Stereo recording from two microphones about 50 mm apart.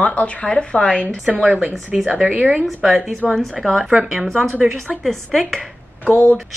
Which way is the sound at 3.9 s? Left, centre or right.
Centre.